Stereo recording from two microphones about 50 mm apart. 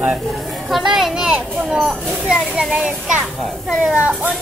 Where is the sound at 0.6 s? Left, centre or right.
Centre.